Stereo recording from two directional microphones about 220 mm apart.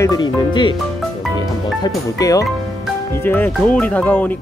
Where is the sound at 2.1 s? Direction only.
15° left (ahead or behind).